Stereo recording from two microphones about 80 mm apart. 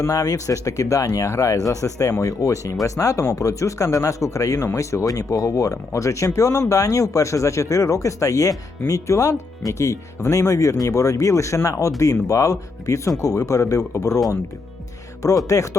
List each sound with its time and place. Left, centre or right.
0.0 s speech: left
15.4 s speech: left